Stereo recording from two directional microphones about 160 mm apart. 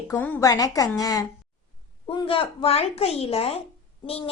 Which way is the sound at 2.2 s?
35° left (ahead or behind).